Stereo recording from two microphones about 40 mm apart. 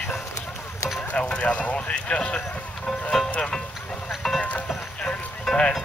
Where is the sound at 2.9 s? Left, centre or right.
Centre.